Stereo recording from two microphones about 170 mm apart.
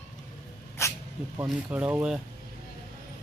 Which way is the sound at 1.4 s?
10° right (ahead or behind).